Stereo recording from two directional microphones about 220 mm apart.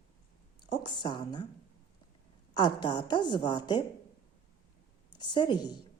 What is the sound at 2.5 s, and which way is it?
A woman's voice, 20° left (ahead or behind).